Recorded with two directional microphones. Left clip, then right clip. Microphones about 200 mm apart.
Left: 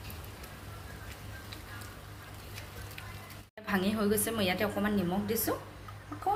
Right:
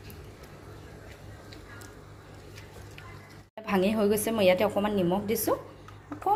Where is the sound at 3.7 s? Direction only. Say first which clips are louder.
Right 5 dB; 30° right (ahead or behind).